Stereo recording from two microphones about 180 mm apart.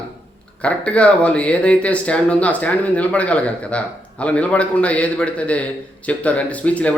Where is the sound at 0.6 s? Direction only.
5° left (ahead or behind).